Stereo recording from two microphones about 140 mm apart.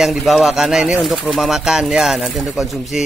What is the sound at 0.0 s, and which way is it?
A man's voice, centre (ahead or behind).